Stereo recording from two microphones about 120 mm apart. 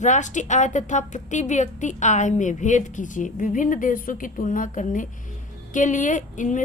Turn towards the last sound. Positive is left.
turn(degrees=90)